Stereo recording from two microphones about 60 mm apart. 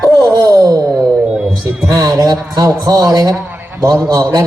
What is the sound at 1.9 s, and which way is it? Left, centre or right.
Speech, right.